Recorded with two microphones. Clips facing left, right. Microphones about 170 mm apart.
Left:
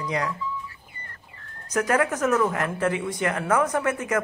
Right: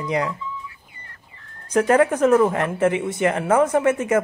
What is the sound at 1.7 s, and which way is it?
Speech, 30° right (ahead or behind).